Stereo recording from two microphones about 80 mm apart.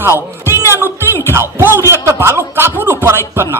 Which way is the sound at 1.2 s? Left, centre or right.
Right.